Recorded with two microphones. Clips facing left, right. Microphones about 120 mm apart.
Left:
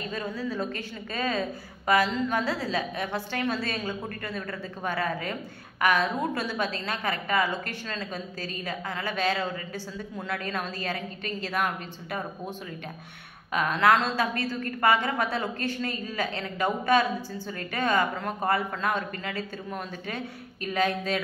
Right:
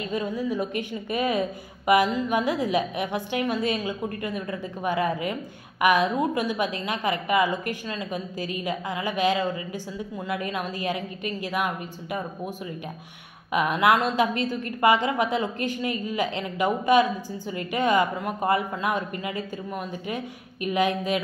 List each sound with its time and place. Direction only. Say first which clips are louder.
0.1 s a woman's voice: right 6 dB; 15° right (ahead or behind)